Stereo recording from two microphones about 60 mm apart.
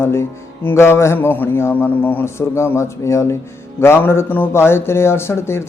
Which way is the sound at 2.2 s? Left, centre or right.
Left.